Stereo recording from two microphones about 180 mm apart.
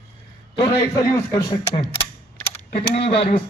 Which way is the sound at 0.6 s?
20° left (ahead or behind).